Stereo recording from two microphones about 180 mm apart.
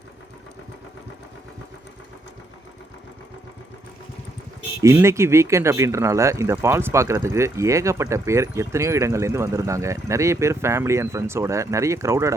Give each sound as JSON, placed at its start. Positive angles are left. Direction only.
{"t": 4.8, "sound": "speech", "side_deg": -15}